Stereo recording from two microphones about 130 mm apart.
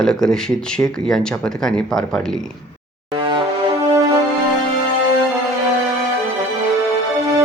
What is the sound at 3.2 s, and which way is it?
Music, 40° right (ahead or behind).